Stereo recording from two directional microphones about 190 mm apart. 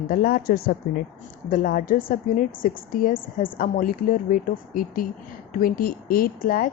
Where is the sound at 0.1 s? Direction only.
50° left (ahead or behind).